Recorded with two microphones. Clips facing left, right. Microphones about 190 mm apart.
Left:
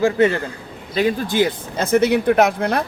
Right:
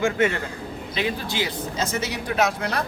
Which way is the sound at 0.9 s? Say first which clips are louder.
Left 9 dB; 45° left (ahead or behind).